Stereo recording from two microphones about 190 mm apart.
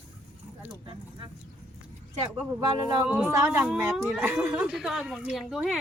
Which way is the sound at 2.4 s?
15° right (ahead or behind).